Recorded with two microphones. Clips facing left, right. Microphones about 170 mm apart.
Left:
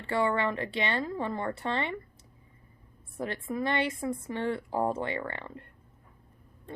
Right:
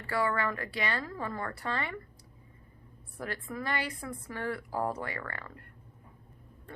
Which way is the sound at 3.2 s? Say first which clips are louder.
Left 5 dB; 20° left (ahead or behind).